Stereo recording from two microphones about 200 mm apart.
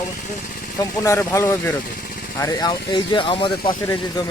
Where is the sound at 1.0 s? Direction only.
15° left (ahead or behind).